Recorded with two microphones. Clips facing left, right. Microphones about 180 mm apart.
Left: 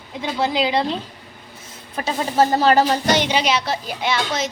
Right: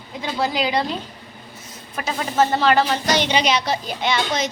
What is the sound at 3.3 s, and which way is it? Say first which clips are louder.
A woman's voice: even; 5° left (ahead or behind).